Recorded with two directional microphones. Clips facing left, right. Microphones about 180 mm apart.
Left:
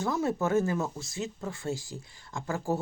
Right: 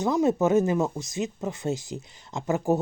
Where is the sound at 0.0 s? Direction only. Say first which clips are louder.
Right 6 dB; 20° right (ahead or behind).